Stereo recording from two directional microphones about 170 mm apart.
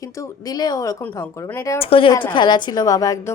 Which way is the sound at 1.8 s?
35° left (ahead or behind).